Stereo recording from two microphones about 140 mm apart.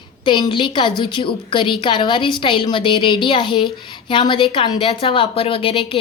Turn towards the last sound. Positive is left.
turn(degrees=40)  # may be behind; listen again after turning